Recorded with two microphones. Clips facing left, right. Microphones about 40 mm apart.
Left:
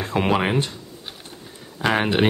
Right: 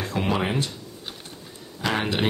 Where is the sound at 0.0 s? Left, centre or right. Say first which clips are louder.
Left 4 dB; left.